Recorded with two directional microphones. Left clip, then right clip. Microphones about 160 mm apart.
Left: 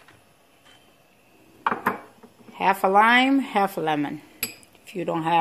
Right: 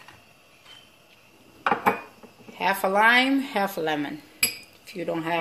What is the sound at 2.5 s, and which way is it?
Speech, 60° left (ahead or behind).